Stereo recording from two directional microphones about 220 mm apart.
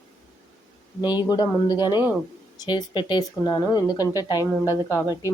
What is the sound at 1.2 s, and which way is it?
A woman's voice, 20° left (ahead or behind).